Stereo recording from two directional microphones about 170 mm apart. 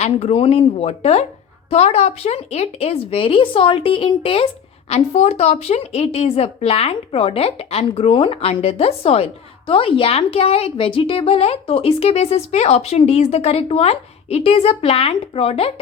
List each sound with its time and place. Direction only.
0.0 s a woman's voice: 40° left (ahead or behind)